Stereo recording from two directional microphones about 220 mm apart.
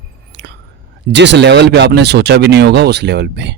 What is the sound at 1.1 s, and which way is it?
A man's voice, 50° right (ahead or behind).